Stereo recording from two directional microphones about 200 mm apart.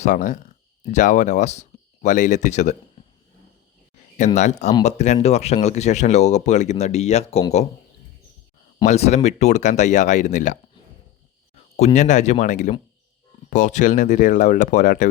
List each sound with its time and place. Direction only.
0.0 s speech: 40° left (ahead or behind)
4.8 s speech: 35° left (ahead or behind)
8.9 s speech: 35° left (ahead or behind)
11.9 s speech: 35° left (ahead or behind)